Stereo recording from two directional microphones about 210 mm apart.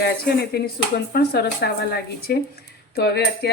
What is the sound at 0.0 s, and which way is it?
Speech, 50° left (ahead or behind).